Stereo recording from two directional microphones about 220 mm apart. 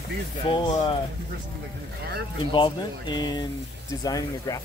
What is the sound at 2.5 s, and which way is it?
Speech, 20° left (ahead or behind).